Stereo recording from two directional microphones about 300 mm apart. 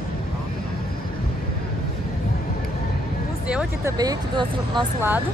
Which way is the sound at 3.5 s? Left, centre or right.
Centre.